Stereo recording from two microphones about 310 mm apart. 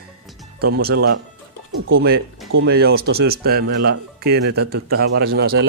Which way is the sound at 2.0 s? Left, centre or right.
Right.